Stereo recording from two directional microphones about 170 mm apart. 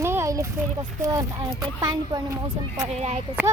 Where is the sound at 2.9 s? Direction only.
40° right (ahead or behind).